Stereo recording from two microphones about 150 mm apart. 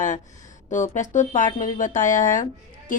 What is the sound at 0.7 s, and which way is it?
Speech, 55° left (ahead or behind).